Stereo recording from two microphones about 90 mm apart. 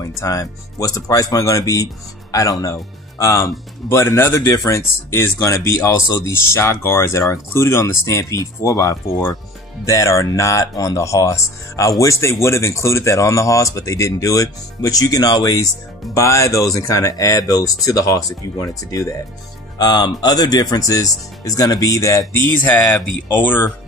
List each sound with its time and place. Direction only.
0.0 s speech: 40° left (ahead or behind)
16.2 s speech: 35° left (ahead or behind)
22.3 s speech: 20° left (ahead or behind)